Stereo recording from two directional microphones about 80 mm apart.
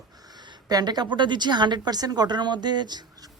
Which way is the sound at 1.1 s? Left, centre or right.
Right.